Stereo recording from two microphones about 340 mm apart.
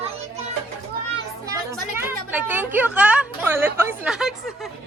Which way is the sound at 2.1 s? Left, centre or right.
Centre.